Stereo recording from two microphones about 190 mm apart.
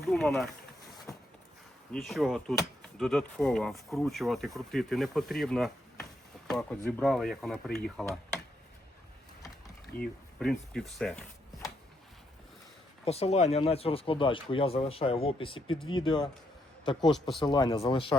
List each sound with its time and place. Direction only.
0.0 s speech: centre (ahead or behind)
1.1 s a sound: 15° left (ahead or behind)
1.9 s speech: centre (ahead or behind)
9.9 s speech: 10° left (ahead or behind)
13.1 s a man's voice: 35° left (ahead or behind)
17.1 s speech: centre (ahead or behind)
17.4 s speech: 25° left (ahead or behind)